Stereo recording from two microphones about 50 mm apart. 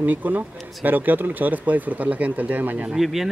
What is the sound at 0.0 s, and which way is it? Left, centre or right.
Speech, right.